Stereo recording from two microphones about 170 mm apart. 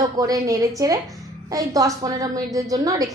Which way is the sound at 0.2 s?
20° right (ahead or behind).